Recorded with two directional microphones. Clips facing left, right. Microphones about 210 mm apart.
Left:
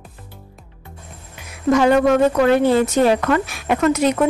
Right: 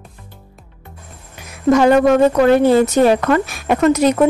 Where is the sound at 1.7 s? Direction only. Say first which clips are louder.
Right 3 dB; 45° right (ahead or behind).